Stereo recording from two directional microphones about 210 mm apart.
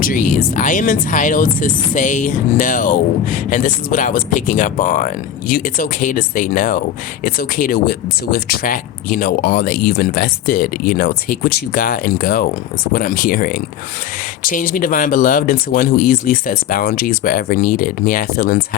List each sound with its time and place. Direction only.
0.0 s speech: 40° left (ahead or behind)